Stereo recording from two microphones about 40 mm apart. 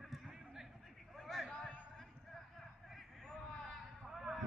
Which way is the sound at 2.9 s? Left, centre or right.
Centre.